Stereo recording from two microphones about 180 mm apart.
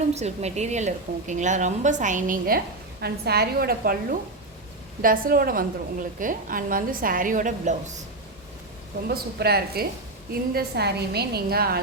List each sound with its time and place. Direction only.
0.1 s a woman's voice: 35° right (ahead or behind)
3.0 s a woman's voice: 60° right (ahead or behind); by 7.9 s 40° right (ahead or behind)
9.0 s a woman's voice: 60° right (ahead or behind)